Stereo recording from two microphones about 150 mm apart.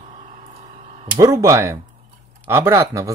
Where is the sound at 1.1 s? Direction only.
20° right (ahead or behind).